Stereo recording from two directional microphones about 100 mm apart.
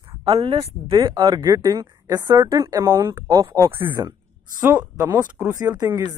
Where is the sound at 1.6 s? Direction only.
40° right (ahead or behind); by 5.4 s 20° right (ahead or behind).